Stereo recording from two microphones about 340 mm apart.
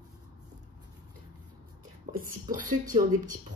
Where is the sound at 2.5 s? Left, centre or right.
Right.